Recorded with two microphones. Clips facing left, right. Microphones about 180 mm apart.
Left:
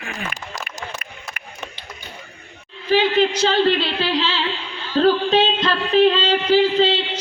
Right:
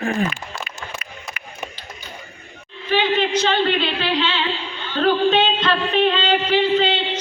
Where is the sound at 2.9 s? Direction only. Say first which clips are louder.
Left 2 dB; 35° left (ahead or behind).